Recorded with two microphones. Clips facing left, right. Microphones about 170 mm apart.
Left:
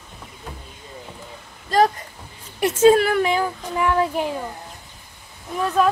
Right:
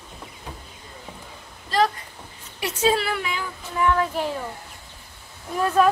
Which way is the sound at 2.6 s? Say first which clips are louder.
Left 8 dB; 50° left (ahead or behind).